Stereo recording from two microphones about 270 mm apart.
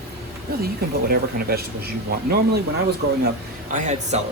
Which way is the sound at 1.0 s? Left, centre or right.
Right.